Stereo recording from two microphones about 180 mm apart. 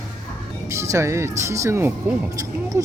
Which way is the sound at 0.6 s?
15° right (ahead or behind).